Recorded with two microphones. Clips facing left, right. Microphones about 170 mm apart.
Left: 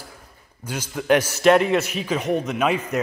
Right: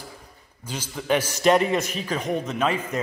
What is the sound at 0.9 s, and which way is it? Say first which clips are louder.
A man's voice: left 4 dB; 10° left (ahead or behind).